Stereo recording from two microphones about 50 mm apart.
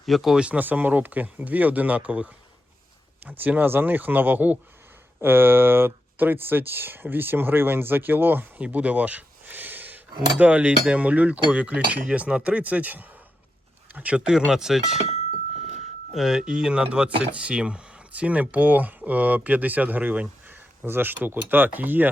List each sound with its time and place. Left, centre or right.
0.0 s speech: centre
0.3 s cutlery: right
0.6 s speech: right
3.3 s speech: right
8.5 s a sound: right
11.0 s cutlery: right
13.9 s speech: right
14.3 s speech: centre
16.1 s speech: centre
16.6 s speech: centre
16.8 s cutlery: right
17.6 s speech: centre; by 22.1 s right